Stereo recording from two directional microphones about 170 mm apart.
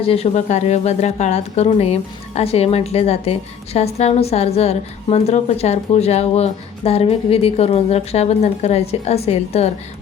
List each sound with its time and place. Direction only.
0.0 s a woman's voice: 35° left (ahead or behind)